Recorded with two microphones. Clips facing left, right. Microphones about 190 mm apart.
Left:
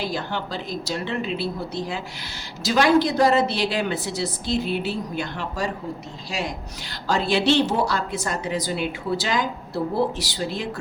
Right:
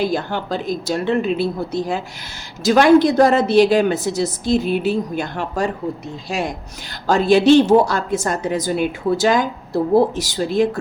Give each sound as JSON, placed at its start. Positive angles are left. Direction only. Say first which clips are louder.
{"t": 0.0, "sound": "a woman's voice", "louder": "right 7 dB", "side_deg": -50}